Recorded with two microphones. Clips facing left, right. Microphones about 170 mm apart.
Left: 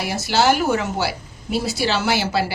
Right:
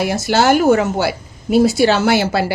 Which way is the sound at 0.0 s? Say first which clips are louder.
Right 4 dB; 50° right (ahead or behind).